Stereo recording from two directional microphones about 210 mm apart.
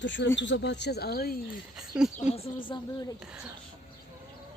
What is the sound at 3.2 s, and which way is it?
Speech, 5° right (ahead or behind).